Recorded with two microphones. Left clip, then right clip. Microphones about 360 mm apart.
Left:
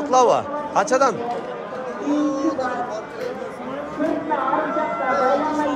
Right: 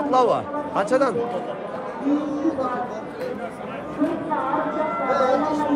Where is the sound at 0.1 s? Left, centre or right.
Centre.